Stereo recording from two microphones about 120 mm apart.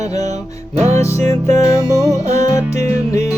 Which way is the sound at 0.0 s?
30° left (ahead or behind).